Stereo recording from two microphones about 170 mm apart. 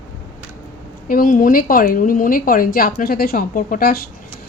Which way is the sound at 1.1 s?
55° left (ahead or behind).